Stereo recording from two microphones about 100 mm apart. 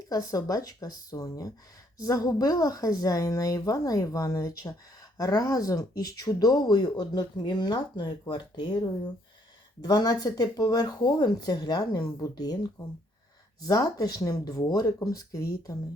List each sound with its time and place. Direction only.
0.1 s speech: 35° left (ahead or behind); by 8.7 s 55° left (ahead or behind)
9.8 s speech: 40° left (ahead or behind)
13.6 s speech: 40° left (ahead or behind)